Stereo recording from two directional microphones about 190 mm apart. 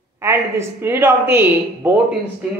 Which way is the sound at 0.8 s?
10° right (ahead or behind).